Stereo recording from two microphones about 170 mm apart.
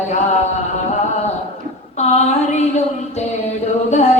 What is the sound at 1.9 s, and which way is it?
Speech, 40° left (ahead or behind).